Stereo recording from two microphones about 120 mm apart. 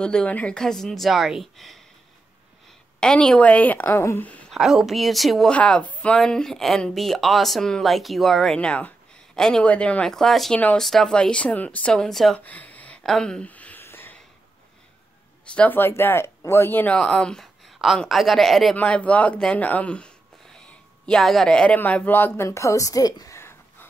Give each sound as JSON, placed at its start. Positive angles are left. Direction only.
{"t": 0.0, "sound": "speech", "side_deg": 10}
{"t": 3.0, "sound": "speech", "side_deg": 5}
{"t": 4.5, "sound": "speech", "side_deg": -5}
{"t": 12.4, "sound": "a sound", "side_deg": 15}
{"t": 15.4, "sound": "speech", "side_deg": 10}